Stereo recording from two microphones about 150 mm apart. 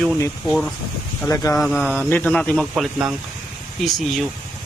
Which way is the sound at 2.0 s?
15° left (ahead or behind).